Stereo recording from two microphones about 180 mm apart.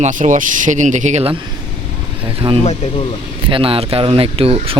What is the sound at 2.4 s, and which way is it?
Speech, 30° right (ahead or behind).